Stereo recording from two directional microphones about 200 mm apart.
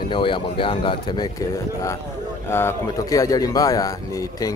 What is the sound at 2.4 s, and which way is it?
Speech, 10° left (ahead or behind).